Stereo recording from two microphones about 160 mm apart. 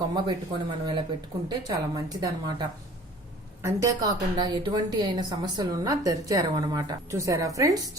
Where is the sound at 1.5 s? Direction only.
25° right (ahead or behind).